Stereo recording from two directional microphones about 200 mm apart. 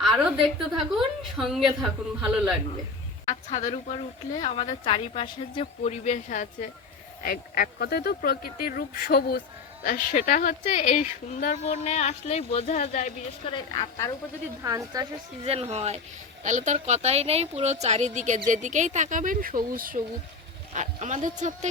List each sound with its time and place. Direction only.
0.0 s a sound: centre (ahead or behind)
0.9 s a woman's voice: centre (ahead or behind)
3.2 s speech: 35° left (ahead or behind)
13.5 s a woman's voice: 20° left (ahead or behind)
14.6 s a woman's voice: 15° right (ahead or behind)
15.4 s speech: 30° right (ahead or behind)